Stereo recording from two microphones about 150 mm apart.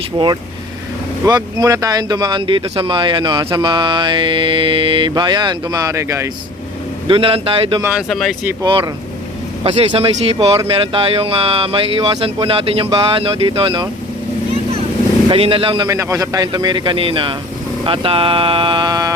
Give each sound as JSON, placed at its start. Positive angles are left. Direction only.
{"t": 1.2, "sound": "speech", "side_deg": -25}
{"t": 7.1, "sound": "speech", "side_deg": -35}
{"t": 7.9, "sound": "speech", "side_deg": 0}
{"t": 9.6, "sound": "speech", "side_deg": -40}
{"t": 15.3, "sound": "speech", "side_deg": -35}
{"t": 15.9, "sound": "speech", "side_deg": -20}